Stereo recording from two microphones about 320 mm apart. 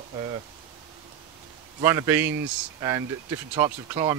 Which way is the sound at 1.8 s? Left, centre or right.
Centre.